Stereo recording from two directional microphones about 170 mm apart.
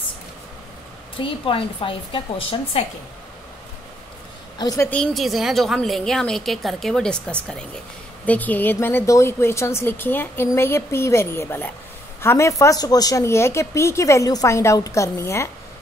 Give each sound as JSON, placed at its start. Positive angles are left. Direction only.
{"t": 1.1, "sound": "a woman's voice", "side_deg": 30}
{"t": 4.6, "sound": "a woman's voice", "side_deg": 20}
{"t": 4.9, "sound": "a woman's voice", "side_deg": 0}